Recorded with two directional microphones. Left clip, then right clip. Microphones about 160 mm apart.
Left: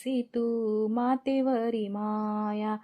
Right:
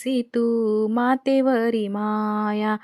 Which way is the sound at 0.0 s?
25° right (ahead or behind).